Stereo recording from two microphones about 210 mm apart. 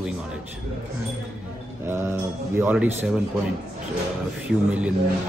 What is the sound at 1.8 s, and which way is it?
Speech, 10° right (ahead or behind).